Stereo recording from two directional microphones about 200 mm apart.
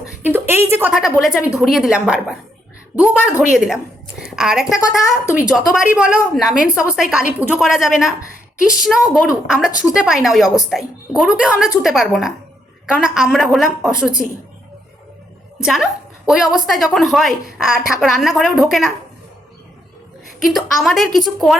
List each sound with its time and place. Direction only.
0.3 s a woman's voice: 10° right (ahead or behind)
15.6 s a woman's voice: centre (ahead or behind)
20.4 s a woman's voice: centre (ahead or behind)